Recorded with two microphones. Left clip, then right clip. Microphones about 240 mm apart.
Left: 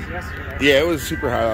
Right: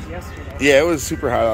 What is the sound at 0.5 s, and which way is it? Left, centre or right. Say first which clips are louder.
Speech: right 2 dB; centre.